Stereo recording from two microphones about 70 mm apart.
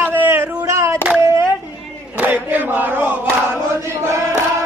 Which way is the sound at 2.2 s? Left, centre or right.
Right.